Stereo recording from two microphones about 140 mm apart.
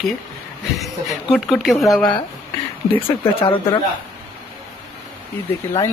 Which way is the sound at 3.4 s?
35° left (ahead or behind).